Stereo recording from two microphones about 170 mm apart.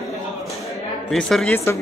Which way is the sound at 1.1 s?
Centre (ahead or behind).